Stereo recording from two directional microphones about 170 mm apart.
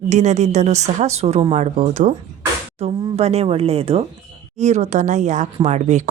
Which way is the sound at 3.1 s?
35° right (ahead or behind).